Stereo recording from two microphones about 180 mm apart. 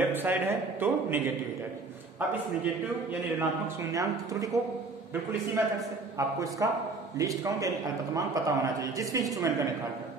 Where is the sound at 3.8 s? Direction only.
20° right (ahead or behind).